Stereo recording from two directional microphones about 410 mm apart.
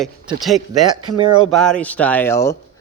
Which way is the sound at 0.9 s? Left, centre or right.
Right.